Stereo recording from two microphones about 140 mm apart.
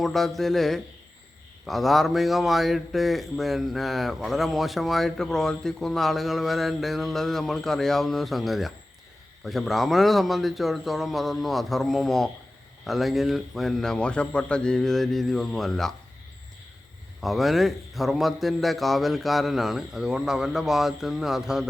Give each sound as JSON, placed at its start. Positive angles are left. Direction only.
{"t": 0.0, "sound": "a man's voice", "side_deg": 0}
{"t": 17.2, "sound": "a man's voice", "side_deg": 0}